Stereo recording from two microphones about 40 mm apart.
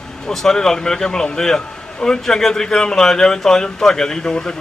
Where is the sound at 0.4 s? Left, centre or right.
Centre.